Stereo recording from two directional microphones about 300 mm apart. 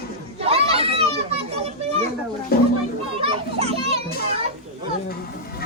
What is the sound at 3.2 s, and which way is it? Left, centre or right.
A child's voice, centre.